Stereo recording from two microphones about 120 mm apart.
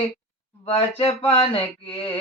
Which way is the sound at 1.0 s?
50° left (ahead or behind).